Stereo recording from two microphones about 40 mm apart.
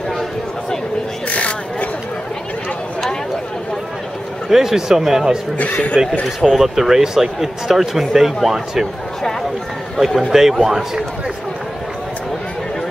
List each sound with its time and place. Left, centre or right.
1.3 s chatter: left
4.5 s speech: centre
5.6 s speech: left
6.6 s speech: centre
9.9 s speech: centre